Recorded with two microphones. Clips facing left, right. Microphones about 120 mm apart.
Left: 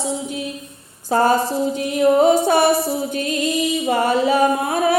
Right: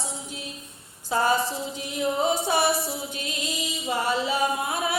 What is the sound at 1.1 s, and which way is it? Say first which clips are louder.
Music: left 7 dB; 45° left (ahead or behind).